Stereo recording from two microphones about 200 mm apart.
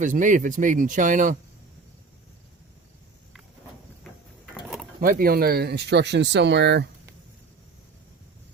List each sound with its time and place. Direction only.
0.0 s speech: 40° right (ahead or behind)
4.9 s speech: 45° right (ahead or behind)